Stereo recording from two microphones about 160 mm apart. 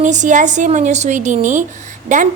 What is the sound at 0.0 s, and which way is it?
A woman's voice, 50° right (ahead or behind).